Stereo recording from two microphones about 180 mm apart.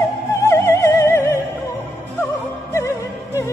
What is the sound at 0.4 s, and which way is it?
Music, 15° left (ahead or behind).